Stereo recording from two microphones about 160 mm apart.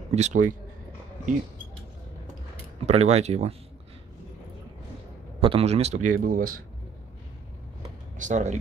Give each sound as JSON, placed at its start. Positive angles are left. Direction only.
{"t": 0.1, "sound": "a man's voice", "side_deg": -50}
{"t": 2.9, "sound": "a man's voice", "side_deg": -40}
{"t": 5.4, "sound": "a man's voice", "side_deg": -35}
{"t": 8.2, "sound": "a man's voice", "side_deg": -50}